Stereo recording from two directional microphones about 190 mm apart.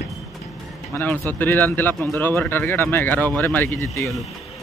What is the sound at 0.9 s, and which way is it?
Speech, 10° left (ahead or behind).